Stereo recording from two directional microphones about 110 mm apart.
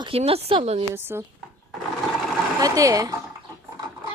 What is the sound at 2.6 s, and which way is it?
Speech, 30° right (ahead or behind).